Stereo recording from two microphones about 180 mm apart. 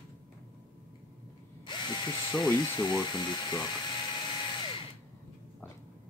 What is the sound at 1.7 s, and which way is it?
Drill, 25° left (ahead or behind).